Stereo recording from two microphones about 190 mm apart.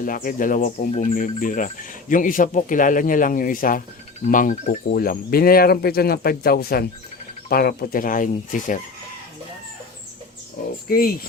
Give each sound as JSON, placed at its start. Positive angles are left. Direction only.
{"t": 0.0, "sound": "speech", "side_deg": 45}
{"t": 10.8, "sound": "speech", "side_deg": 50}